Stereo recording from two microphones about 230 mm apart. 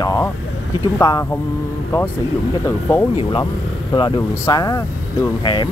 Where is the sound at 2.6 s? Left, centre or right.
Centre.